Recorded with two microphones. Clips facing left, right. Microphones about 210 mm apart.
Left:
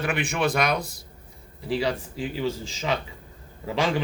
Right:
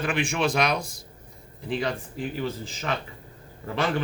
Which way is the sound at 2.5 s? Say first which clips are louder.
Left 3 dB; 90° left.